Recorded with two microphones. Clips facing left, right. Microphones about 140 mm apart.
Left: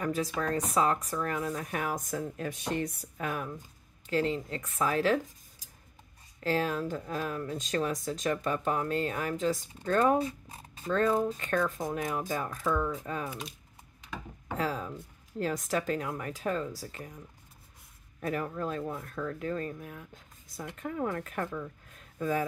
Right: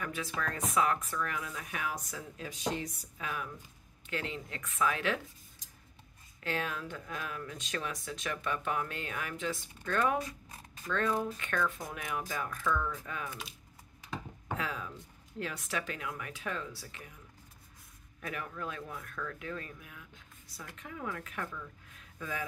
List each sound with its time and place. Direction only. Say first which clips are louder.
0.0 s speech: left 6 dB; 40° left (ahead or behind)
6.4 s speech: left 7 dB; 35° left (ahead or behind)
10.9 s speech: left 5 dB; 40° left (ahead or behind)
13.3 s speech: left 5 dB; centre (ahead or behind)
14.6 s speech: left 9 dB; 35° left (ahead or behind)
18.2 s speech: left 7 dB; 35° left (ahead or behind)